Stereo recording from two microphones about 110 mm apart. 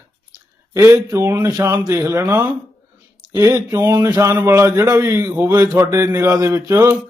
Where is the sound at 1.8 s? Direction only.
35° right (ahead or behind).